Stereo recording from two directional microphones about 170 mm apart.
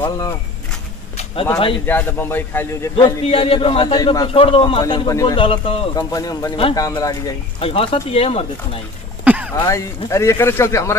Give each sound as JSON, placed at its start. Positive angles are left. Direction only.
{"t": 1.1, "sound": "a sound", "side_deg": 30}
{"t": 1.9, "sound": "a man's voice", "side_deg": 10}
{"t": 3.3, "sound": "a man's voice", "side_deg": 35}
{"t": 7.6, "sound": "speech", "side_deg": 35}
{"t": 9.2, "sound": "throat clearing", "side_deg": -10}
{"t": 9.6, "sound": "a man's voice", "side_deg": 15}